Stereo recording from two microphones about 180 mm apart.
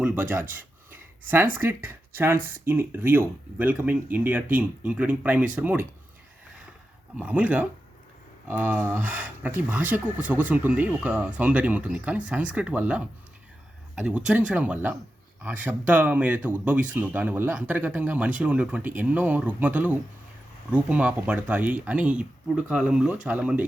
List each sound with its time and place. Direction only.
0.0 s speech: 10° right (ahead or behind)
1.5 s speech: 10° right (ahead or behind)
7.2 s speech: 5° right (ahead or behind)